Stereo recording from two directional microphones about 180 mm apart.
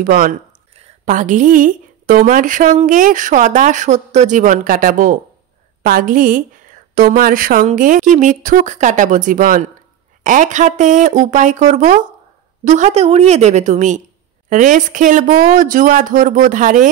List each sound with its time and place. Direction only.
0.0 s a woman's voice: 50° right (ahead or behind)